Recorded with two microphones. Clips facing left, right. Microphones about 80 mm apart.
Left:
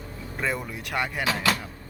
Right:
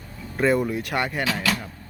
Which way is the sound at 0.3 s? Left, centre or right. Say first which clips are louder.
Right 9 dB; centre.